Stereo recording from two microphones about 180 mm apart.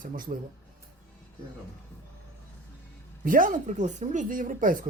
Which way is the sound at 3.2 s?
50° right (ahead or behind).